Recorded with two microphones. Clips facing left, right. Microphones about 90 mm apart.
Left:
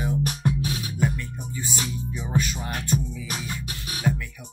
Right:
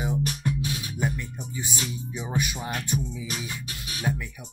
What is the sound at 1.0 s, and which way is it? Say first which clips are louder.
Speech: left 4 dB; 20° right (ahead or behind).